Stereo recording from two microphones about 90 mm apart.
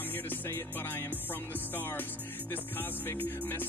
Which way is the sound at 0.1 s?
25° left (ahead or behind).